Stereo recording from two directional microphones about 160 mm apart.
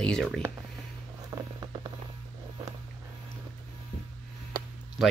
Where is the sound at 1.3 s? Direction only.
20° right (ahead or behind).